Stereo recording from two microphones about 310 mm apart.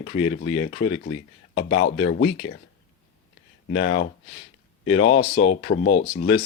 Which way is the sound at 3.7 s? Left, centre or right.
Left.